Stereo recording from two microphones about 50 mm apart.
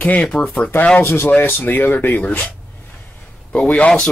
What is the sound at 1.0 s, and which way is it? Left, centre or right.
Speech, left.